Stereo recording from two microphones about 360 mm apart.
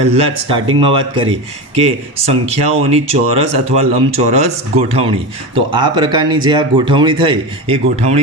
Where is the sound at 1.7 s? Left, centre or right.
Centre.